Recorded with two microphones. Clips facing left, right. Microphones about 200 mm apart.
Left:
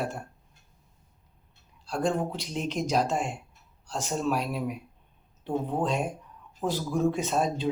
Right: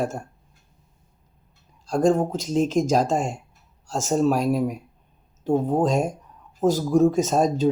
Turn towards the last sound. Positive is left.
turn(degrees=-40)  # may be behind; listen again after turning